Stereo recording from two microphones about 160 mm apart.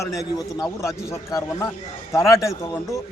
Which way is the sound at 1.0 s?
20° left (ahead or behind).